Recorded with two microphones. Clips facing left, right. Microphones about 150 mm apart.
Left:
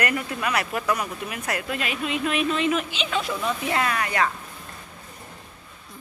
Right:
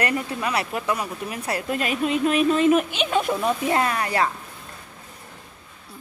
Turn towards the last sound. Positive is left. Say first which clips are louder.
# right 2 dB
turn(degrees=-30)  # may be behind; listen again after turning